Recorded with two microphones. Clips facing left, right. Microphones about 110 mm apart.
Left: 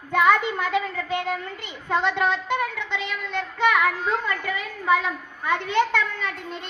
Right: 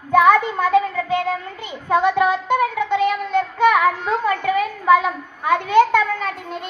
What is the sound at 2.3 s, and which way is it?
Child singing, 45° right (ahead or behind).